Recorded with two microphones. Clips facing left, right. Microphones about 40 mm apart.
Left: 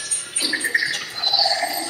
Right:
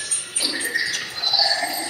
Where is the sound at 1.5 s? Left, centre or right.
Right.